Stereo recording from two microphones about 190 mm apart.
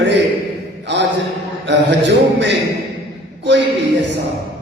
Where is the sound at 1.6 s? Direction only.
65° right (ahead or behind).